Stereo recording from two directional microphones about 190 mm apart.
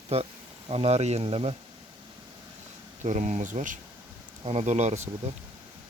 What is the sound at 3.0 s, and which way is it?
Speech, 40° right (ahead or behind).